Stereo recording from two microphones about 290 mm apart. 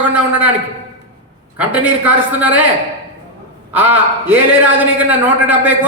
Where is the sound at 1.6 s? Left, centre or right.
Centre.